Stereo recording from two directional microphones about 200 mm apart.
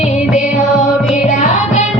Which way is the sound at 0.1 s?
35° left (ahead or behind).